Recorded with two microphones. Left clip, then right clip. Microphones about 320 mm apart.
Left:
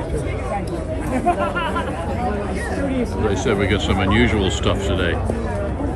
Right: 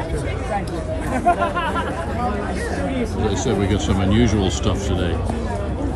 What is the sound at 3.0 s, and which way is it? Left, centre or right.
Speech, centre.